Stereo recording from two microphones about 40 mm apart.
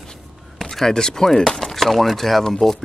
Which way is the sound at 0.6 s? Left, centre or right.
Centre.